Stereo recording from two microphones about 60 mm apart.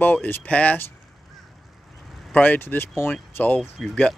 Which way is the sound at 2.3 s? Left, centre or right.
Left.